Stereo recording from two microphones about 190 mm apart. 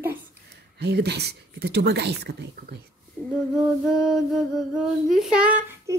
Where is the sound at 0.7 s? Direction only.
60° right (ahead or behind).